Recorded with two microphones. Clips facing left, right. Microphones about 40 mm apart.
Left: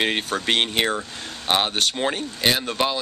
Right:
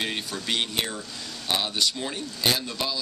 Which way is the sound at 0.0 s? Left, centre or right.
Left.